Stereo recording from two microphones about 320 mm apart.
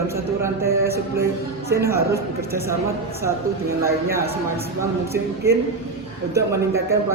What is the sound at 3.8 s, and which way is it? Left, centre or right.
Speech, centre.